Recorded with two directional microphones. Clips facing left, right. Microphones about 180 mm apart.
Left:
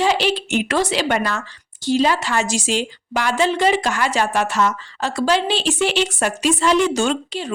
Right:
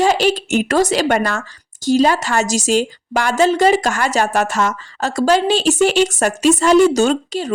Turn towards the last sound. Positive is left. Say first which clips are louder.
# right 5 dB
turn(degrees=-40)  # may be behind; listen again after turning